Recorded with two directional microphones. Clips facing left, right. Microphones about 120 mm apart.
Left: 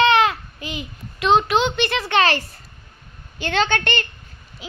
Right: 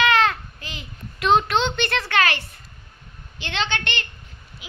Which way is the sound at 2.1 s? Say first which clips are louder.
Left 4 dB; 25° left (ahead or behind).